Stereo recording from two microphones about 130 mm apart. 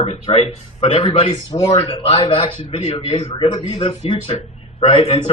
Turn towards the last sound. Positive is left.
turn(degrees=45)  # may be behind; listen again after turning